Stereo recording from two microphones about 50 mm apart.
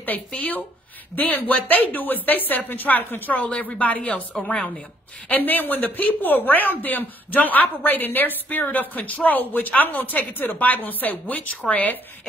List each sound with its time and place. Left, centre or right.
1.1 s speech: left
3.7 s speech: left